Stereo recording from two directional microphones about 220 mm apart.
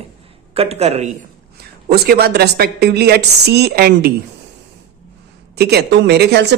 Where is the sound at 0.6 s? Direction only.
30° right (ahead or behind).